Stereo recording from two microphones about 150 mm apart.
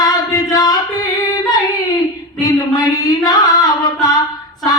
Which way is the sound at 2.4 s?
25° left (ahead or behind).